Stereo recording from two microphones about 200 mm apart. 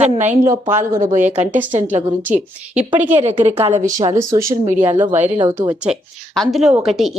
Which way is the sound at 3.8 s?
15° right (ahead or behind).